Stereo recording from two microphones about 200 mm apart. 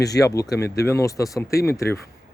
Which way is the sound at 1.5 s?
50° left (ahead or behind).